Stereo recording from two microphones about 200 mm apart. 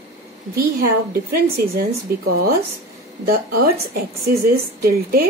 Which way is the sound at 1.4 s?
50° right (ahead or behind).